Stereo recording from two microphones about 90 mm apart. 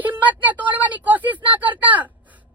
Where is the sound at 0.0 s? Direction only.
20° right (ahead or behind).